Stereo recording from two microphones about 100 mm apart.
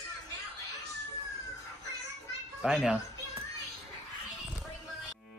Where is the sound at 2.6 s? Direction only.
5° right (ahead or behind).